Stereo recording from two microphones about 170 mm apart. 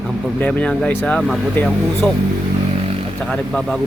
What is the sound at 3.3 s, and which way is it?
Speech, centre (ahead or behind).